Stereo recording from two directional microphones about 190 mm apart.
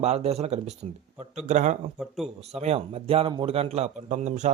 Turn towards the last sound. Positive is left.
turn(degrees=-40)  # may be behind; listen again after turning